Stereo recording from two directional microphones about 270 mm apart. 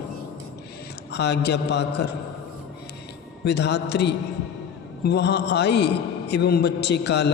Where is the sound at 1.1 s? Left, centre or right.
Left.